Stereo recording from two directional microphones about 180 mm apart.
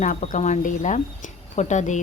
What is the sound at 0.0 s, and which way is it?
A woman's voice, 45° left (ahead or behind).